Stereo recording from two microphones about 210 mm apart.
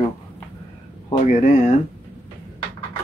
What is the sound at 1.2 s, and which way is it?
Speech, 35° left (ahead or behind).